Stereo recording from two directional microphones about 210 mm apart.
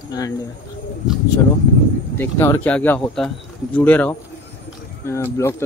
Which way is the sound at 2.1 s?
10° left (ahead or behind).